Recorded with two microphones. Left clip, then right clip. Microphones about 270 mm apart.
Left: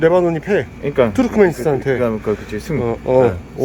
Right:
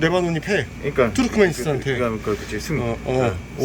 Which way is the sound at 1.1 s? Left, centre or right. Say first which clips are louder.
Left 4 dB; centre.